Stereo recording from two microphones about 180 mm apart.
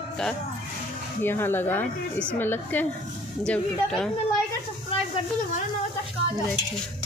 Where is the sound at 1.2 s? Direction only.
10° left (ahead or behind).